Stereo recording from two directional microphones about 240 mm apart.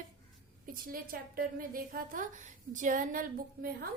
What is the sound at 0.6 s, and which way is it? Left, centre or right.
A woman's voice, right.